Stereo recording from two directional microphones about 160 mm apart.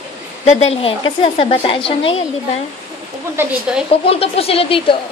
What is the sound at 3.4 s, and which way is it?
Speech, 10° right (ahead or behind).